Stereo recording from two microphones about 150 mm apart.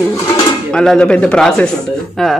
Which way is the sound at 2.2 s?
Centre (ahead or behind).